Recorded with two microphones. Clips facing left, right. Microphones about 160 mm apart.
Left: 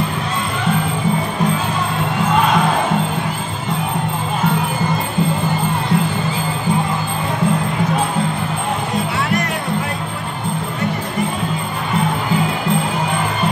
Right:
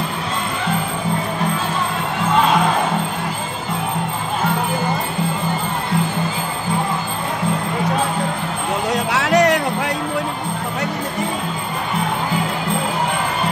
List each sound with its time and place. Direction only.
8.9 s music: 85° right